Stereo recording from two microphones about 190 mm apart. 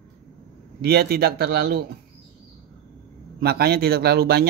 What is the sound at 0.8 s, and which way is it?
A man's voice, 55° right (ahead or behind).